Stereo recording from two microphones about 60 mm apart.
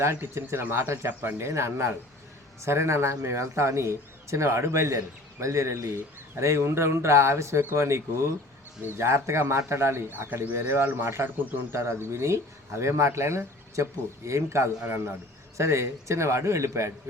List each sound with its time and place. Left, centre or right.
0.0 s speech: right
14.8 s speech: right
15.5 s speech: right